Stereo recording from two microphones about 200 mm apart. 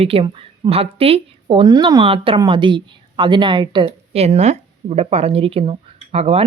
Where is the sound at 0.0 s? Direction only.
30° right (ahead or behind).